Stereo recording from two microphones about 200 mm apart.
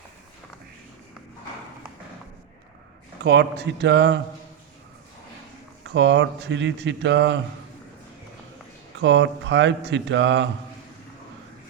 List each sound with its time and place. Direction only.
3.2 s speech: 55° right (ahead or behind)
5.8 s speech: 65° right (ahead or behind)
9.0 s speech: 65° right (ahead or behind)